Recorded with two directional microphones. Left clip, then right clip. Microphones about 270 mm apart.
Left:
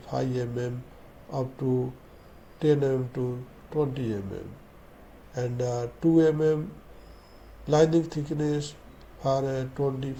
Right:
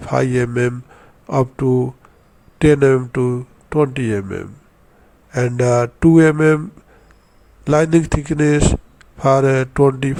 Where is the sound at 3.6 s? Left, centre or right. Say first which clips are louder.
Right 11 dB; right.